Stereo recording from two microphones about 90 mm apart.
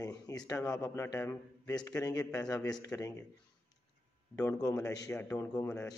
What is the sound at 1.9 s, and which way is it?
Speech, 40° left (ahead or behind).